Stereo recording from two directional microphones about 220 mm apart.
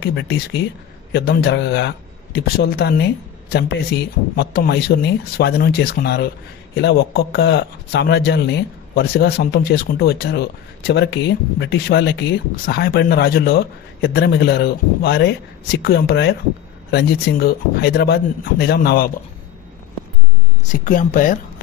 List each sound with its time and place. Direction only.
0.0 s a man's voice: 55° left (ahead or behind)
20.6 s speech: 35° left (ahead or behind)